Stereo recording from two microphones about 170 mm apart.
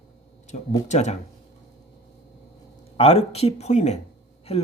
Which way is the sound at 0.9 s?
40° left (ahead or behind).